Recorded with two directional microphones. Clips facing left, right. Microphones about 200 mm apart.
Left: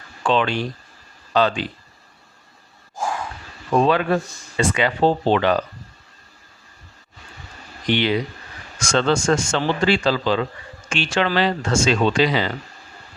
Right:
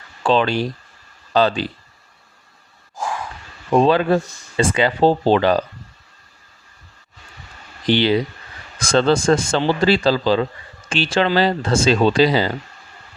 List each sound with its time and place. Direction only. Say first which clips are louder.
0.2 s speech: right 3 dB; 35° right (ahead or behind)
3.7 s speech: right 3 dB; 30° right (ahead or behind)
7.9 s speech: right 4 dB; 30° right (ahead or behind)